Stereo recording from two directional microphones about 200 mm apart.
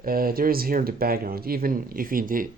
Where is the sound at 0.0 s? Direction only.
45° right (ahead or behind).